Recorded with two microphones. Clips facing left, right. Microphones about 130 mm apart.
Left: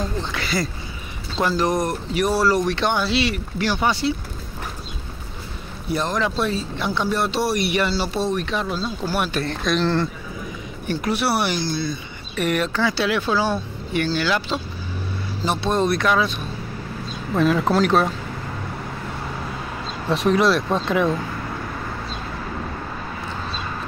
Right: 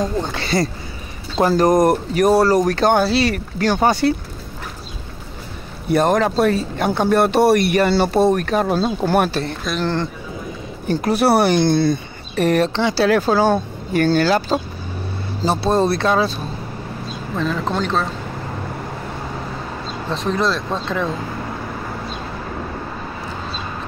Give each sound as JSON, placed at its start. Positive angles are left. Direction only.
{"t": 0.2, "sound": "speech", "side_deg": -35}
{"t": 1.5, "sound": "speech", "side_deg": -45}
{"t": 5.9, "sound": "speech", "side_deg": -55}
{"t": 9.7, "sound": "speech", "side_deg": -5}
{"t": 10.9, "sound": "speech", "side_deg": -40}
{"t": 12.4, "sound": "speech", "side_deg": -35}
{"t": 17.4, "sound": "speech", "side_deg": 10}
{"t": 20.2, "sound": "speech", "side_deg": 5}